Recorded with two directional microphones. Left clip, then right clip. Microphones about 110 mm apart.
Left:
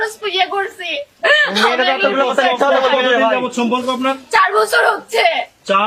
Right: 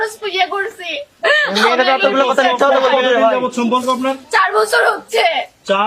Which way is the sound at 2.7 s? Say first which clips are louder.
Right 1 dB; 5° right (ahead or behind).